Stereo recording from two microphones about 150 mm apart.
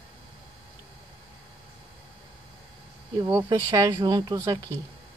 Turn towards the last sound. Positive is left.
turn(degrees=-25)  # may be behind; listen again after turning